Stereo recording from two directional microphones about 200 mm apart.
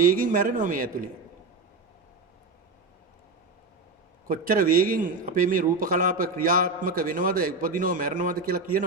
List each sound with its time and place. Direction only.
0.0 s a man's voice: 40° right (ahead or behind)
4.3 s a man's voice: 45° right (ahead or behind)